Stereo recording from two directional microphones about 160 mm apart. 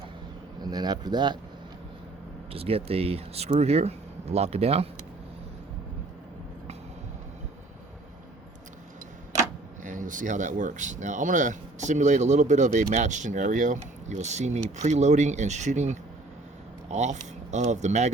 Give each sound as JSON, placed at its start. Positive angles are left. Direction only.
{"t": 0.6, "sound": "speech", "side_deg": -25}
{"t": 2.5, "sound": "speech", "side_deg": -35}
{"t": 9.8, "sound": "speech", "side_deg": -55}